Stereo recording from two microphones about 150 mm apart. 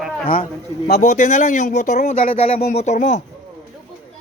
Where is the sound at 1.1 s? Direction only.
55° left (ahead or behind).